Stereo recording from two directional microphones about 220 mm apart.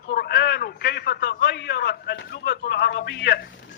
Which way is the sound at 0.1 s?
50° left (ahead or behind).